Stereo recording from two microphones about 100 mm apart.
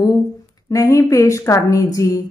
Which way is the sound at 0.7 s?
35° left (ahead or behind).